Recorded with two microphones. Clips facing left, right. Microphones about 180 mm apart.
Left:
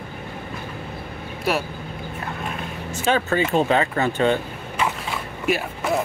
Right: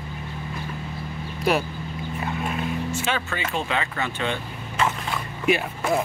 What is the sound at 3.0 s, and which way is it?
Speech, 45° left (ahead or behind).